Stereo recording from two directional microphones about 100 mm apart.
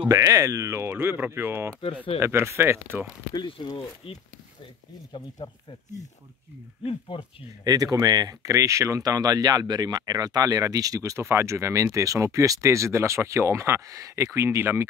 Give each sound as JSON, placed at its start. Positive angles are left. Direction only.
{"t": 0.1, "sound": "speech", "side_deg": -35}
{"t": 3.3, "sound": "speech", "side_deg": 50}
{"t": 5.1, "sound": "speech", "side_deg": 55}
{"t": 6.8, "sound": "speech", "side_deg": 65}
{"t": 7.6, "sound": "speech", "side_deg": -40}